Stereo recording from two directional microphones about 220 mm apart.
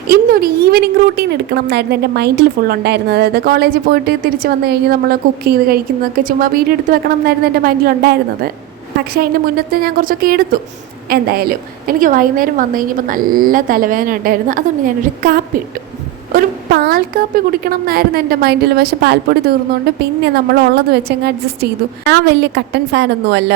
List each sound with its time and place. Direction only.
0.1 s a woman's voice: 45° right (ahead or behind)